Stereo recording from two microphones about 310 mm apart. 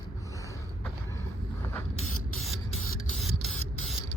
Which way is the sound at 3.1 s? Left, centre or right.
Centre.